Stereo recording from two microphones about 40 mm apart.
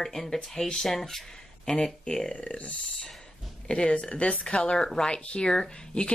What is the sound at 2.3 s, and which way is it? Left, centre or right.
Speech, left.